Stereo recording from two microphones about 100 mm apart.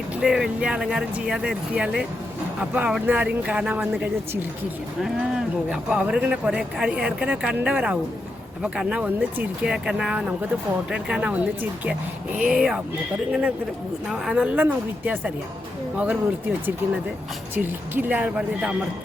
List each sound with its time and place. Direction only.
0.2 s speech: 5° right (ahead or behind)
5.7 s speech: 10° right (ahead or behind)
14.1 s speech: 5° right (ahead or behind)